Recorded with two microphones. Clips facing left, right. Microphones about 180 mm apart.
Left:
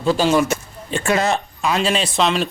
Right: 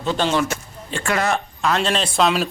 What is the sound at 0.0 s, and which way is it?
Speech, 5° left (ahead or behind).